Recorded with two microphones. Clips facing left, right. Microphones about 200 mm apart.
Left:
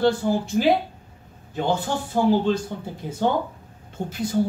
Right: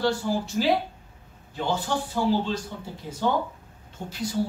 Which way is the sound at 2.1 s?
55° left (ahead or behind).